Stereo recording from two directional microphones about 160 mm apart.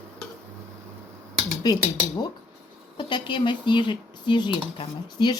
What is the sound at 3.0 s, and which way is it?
Speech, 30° left (ahead or behind).